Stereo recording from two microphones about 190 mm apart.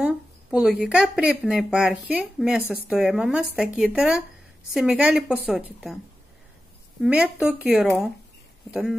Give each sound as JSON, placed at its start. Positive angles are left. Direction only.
{"t": 0.0, "sound": "speech", "side_deg": -5}
{"t": 7.0, "sound": "speech", "side_deg": -5}